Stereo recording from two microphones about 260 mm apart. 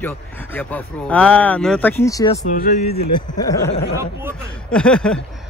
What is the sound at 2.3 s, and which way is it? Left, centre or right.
Speech, left.